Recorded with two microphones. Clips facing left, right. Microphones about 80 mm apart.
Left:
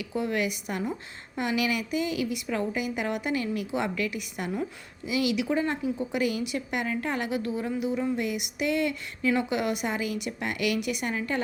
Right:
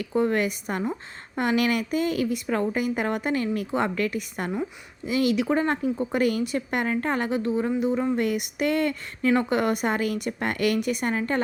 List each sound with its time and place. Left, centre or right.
0.0 s speech: right
8.1 s speech: right